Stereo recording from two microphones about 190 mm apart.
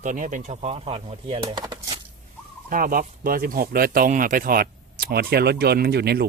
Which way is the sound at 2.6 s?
45° right (ahead or behind).